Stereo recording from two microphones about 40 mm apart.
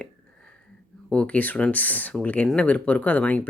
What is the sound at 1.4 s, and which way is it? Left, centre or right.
Speech, left.